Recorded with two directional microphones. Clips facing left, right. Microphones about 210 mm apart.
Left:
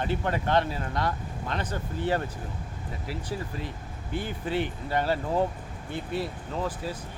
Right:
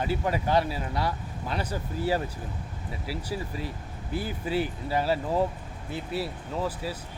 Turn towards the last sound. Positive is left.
turn(degrees=-5)  # may be behind; listen again after turning